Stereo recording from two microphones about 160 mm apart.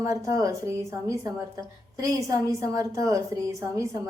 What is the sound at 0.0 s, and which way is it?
A woman's voice, 20° right (ahead or behind).